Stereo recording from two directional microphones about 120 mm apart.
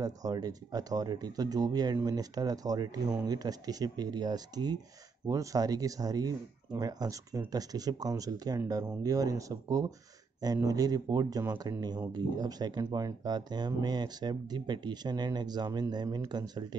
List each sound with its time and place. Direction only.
0.0 s speech: 30° right (ahead or behind)